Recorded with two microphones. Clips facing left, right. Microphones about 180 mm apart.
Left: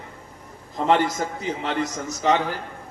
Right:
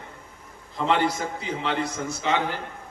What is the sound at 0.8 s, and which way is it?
A man's voice, 45° left (ahead or behind).